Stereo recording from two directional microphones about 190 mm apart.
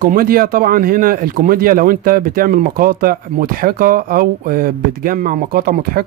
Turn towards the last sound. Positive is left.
turn(degrees=-50)  # may be behind; listen again after turning